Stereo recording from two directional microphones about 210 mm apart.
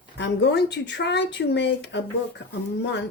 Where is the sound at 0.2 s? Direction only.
55° left (ahead or behind).